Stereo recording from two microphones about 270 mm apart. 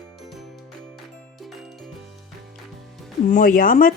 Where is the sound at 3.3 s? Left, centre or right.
Left.